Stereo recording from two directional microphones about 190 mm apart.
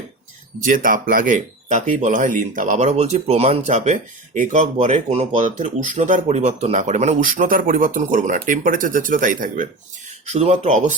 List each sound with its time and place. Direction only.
0.6 s speech: 45° right (ahead or behind)